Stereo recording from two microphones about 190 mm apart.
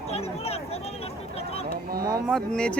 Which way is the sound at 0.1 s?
30° left (ahead or behind).